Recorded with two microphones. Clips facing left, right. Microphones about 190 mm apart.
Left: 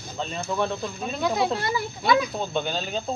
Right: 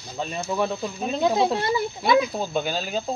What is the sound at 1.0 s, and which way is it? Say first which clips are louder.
Speech: right 4 dB; 20° right (ahead or behind).